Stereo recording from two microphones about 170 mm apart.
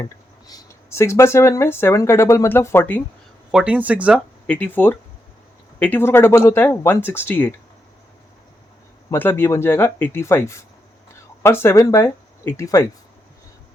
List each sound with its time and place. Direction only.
0.0 s speech: 20° left (ahead or behind)
3.5 s speech: 5° right (ahead or behind)
4.4 s speech: 10° left (ahead or behind)
9.0 s speech: 10° left (ahead or behind)